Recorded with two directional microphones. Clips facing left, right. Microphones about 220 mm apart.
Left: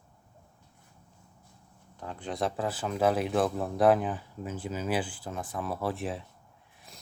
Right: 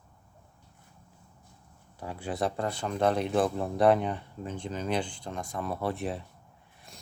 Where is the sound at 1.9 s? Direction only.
10° right (ahead or behind).